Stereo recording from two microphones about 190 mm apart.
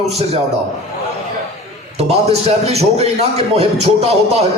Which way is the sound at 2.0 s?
35° right (ahead or behind).